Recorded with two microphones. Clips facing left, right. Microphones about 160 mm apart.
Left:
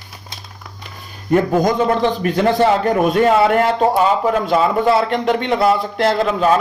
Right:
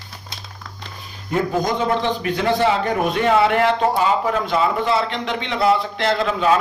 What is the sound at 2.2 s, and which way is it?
A man's voice, 45° left (ahead or behind).